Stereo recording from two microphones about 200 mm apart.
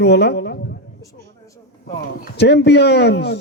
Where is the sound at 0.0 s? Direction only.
55° left (ahead or behind).